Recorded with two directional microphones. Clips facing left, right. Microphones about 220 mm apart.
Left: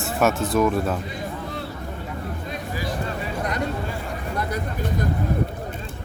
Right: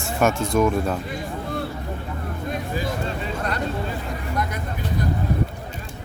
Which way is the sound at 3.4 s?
20° left (ahead or behind).